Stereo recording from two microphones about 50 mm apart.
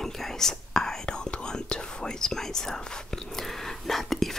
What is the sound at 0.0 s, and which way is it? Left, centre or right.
Whispering, centre.